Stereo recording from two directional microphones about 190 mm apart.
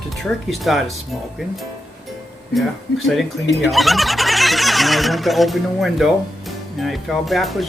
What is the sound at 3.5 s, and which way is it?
Speech, centre (ahead or behind).